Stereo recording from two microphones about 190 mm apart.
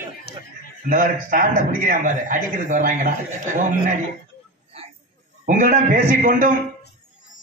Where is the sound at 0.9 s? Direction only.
45° right (ahead or behind).